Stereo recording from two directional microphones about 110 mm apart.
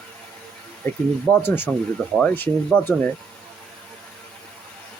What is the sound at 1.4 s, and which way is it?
Speech, 20° left (ahead or behind).